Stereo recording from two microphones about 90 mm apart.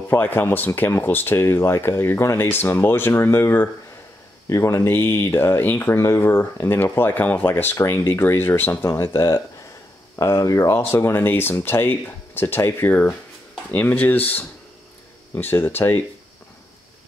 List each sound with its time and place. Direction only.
0.1 s speech: 20° left (ahead or behind)